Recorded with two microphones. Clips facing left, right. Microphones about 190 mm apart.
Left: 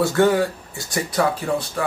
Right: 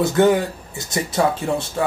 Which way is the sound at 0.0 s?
20° right (ahead or behind).